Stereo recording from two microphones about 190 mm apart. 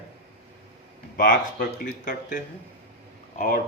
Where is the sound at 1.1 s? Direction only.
45° left (ahead or behind).